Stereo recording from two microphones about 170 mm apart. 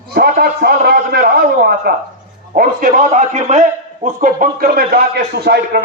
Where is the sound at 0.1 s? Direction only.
65° right (ahead or behind).